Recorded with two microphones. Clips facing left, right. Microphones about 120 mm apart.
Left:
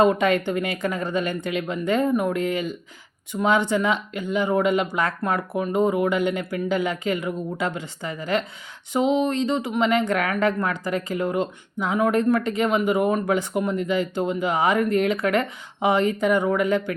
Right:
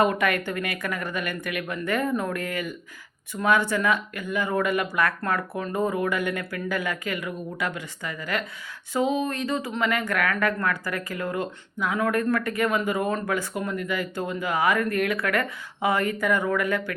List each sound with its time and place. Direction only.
0.0 s speech: 25° left (ahead or behind)